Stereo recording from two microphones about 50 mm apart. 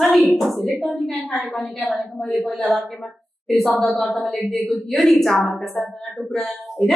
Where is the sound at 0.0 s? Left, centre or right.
Centre.